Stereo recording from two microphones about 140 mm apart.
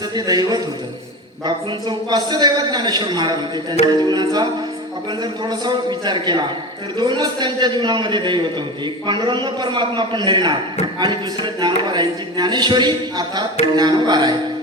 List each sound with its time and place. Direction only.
0.3 s music: 25° right (ahead or behind)
1.5 s speech: 30° right (ahead or behind)
3.8 s music: 30° right (ahead or behind)
5.2 s speech: 30° right (ahead or behind)